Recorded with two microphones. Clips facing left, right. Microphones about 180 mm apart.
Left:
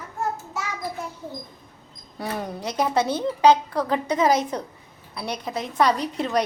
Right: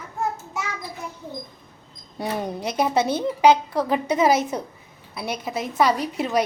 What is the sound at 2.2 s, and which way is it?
A woman's voice, 15° right (ahead or behind).